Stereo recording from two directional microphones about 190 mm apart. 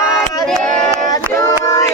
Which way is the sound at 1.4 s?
15° left (ahead or behind).